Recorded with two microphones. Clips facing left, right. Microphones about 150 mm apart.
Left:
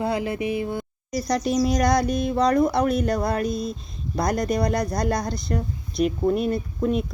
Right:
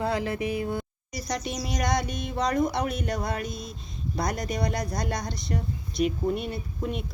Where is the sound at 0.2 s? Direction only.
35° right (ahead or behind).